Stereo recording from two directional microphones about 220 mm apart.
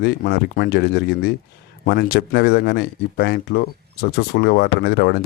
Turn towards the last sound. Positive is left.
turn(degrees=45)  # may be behind; listen again after turning